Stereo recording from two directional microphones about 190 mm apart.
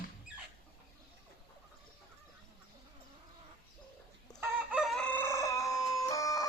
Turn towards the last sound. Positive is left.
turn(degrees=15)  # may be behind; listen again after turning